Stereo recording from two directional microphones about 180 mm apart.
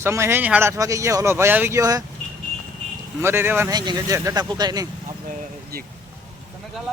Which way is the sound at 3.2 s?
15° right (ahead or behind).